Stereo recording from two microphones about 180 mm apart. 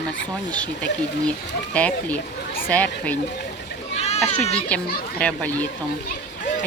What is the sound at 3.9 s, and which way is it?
Goat, 35° left (ahead or behind).